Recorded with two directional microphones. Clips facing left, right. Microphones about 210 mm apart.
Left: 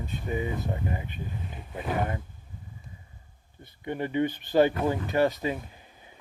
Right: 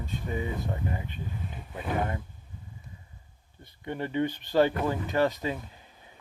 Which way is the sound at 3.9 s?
15° left (ahead or behind).